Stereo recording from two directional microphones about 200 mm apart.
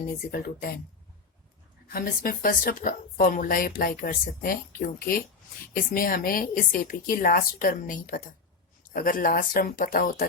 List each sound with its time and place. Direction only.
0.3 s speech: 50° left (ahead or behind)
1.9 s speech: 45° left (ahead or behind)